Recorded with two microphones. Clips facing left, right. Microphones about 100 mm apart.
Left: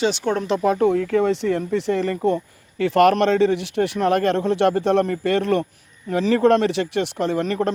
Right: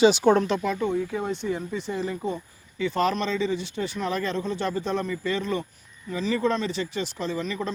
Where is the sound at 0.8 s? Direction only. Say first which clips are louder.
Left 9 dB; 75° left (ahead or behind).